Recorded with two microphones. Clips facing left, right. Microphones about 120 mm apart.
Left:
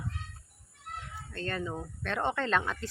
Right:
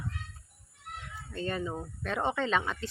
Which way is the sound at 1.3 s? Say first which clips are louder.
Right 2 dB; 10° right (ahead or behind).